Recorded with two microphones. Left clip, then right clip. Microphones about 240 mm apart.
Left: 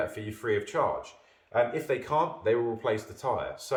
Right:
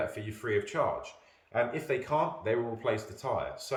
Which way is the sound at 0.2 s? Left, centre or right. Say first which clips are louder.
Left 2 dB; centre.